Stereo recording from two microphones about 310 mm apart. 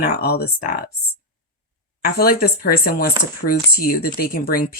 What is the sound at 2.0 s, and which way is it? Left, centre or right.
Speech, left.